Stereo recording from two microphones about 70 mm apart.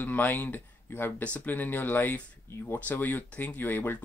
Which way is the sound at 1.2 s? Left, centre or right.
Left.